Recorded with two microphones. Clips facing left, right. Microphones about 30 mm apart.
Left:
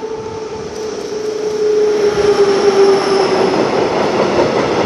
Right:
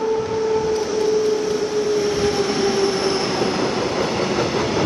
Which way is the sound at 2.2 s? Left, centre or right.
Left.